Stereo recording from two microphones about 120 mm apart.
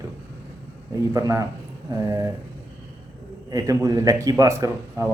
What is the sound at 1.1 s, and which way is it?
A man's voice, 30° right (ahead or behind).